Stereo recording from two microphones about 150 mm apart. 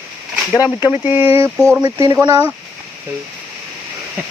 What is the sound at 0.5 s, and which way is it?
Speech, 25° left (ahead or behind).